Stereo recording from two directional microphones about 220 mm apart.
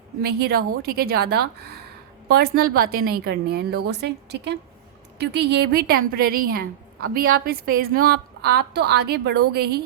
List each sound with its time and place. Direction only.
0.2 s a woman's voice: 45° right (ahead or behind)